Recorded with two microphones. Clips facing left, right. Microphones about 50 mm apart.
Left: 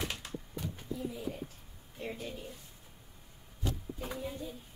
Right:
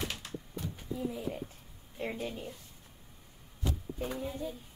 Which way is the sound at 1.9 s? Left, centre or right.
Right.